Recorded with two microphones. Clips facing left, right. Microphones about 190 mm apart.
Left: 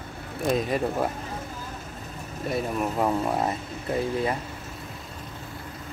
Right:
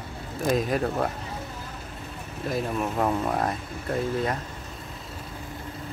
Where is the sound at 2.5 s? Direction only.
Centre (ahead or behind).